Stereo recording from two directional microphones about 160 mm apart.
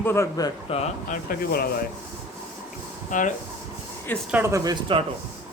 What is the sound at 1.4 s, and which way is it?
Speech, 70° left (ahead or behind).